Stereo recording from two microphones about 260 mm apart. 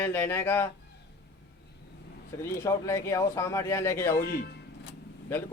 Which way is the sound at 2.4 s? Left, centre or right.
Centre.